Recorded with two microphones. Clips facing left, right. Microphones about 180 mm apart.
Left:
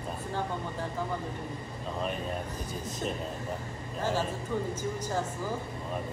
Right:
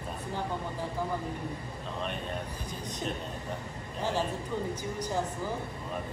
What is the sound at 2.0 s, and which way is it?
Speech, 5° left (ahead or behind).